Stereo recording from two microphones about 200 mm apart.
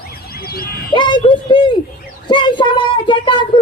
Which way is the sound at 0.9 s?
25° left (ahead or behind).